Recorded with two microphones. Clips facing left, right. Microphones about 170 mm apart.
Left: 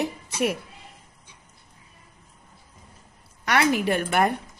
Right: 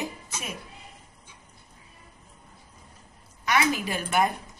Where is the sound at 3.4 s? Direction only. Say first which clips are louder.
Left 3 dB; 65° left (ahead or behind).